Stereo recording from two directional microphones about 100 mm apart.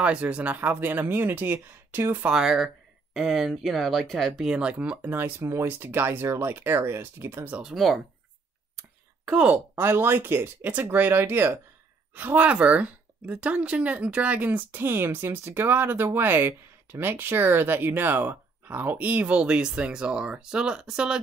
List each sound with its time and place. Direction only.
0.0 s speech: 10° right (ahead or behind)
2.3 s a woman's voice: 5° right (ahead or behind); by 7.6 s 20° right (ahead or behind)
7.6 s speech: centre (ahead or behind)
9.2 s speech: 10° right (ahead or behind)
9.8 s a woman's voice: 25° right (ahead or behind); by 21.2 s 10° right (ahead or behind)